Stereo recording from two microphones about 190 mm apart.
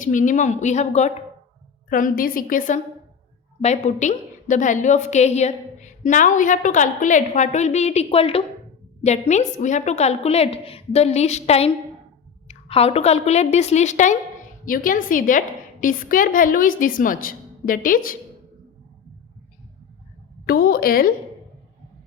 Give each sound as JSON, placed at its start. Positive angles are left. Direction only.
{"t": 0.0, "sound": "a woman's voice", "side_deg": 40}
{"t": 20.5, "sound": "a woman's voice", "side_deg": 50}